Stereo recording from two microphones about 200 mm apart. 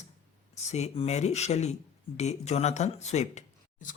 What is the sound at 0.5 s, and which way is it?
Speech, 35° left (ahead or behind).